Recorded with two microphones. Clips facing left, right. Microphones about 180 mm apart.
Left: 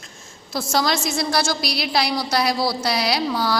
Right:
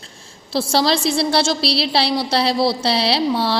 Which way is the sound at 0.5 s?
30° right (ahead or behind).